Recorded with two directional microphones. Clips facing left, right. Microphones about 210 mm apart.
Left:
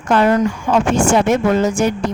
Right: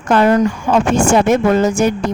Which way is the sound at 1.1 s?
45° right (ahead or behind).